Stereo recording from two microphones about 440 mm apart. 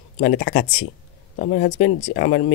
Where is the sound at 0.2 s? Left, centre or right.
Left.